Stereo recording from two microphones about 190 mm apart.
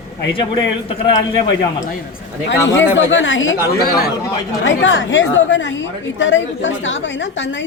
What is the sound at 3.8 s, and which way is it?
Speech, 50° left (ahead or behind).